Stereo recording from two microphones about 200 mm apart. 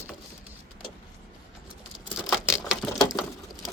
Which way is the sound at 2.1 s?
Centre (ahead or behind).